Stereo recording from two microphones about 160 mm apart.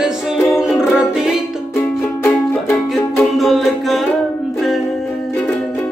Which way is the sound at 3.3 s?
Centre (ahead or behind).